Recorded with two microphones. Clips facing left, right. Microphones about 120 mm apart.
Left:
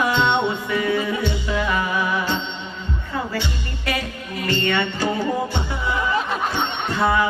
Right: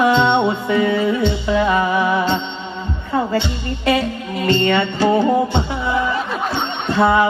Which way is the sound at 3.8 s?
25° right (ahead or behind).